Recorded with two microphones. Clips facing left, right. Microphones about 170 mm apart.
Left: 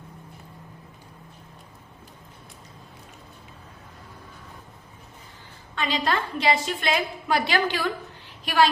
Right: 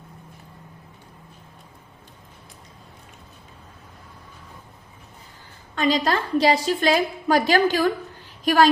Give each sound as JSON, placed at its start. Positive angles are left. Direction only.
{"t": 5.7, "sound": "a woman's voice", "side_deg": -40}